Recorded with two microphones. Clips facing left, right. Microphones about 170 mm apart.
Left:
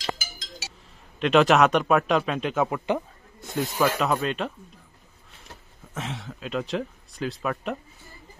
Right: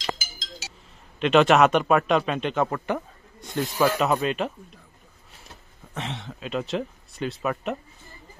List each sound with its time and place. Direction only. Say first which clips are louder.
0.3 s music: even; 65° left (ahead or behind)
1.2 s speech: right 1 dB; centre (ahead or behind)
3.3 s snake: even; 5° left (ahead or behind)
3.7 s speech: right 2 dB; 10° right (ahead or behind)
5.9 s speech: right 1 dB; centre (ahead or behind)